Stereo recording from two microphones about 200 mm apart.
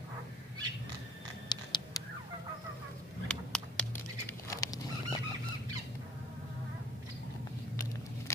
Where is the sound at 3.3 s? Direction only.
5° left (ahead or behind).